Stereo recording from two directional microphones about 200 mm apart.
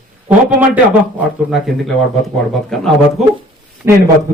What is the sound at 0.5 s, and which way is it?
A man's voice, 5° right (ahead or behind).